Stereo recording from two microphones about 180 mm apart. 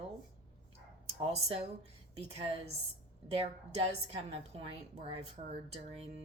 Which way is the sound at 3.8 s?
35° right (ahead or behind).